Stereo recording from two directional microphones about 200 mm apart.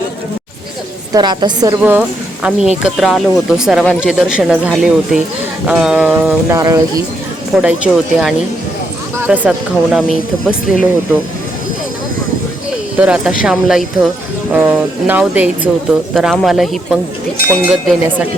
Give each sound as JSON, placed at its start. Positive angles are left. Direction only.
{"t": 1.1, "sound": "a woman's voice", "side_deg": -20}
{"t": 1.8, "sound": "speech", "side_deg": -5}
{"t": 6.5, "sound": "speech", "side_deg": -15}
{"t": 7.6, "sound": "speech", "side_deg": -5}
{"t": 13.0, "sound": "speech", "side_deg": -5}